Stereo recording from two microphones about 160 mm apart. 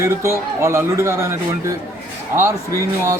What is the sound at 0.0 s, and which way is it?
Speech, 15° right (ahead or behind).